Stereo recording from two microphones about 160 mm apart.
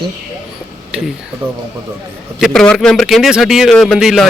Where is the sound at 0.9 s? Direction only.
5° right (ahead or behind).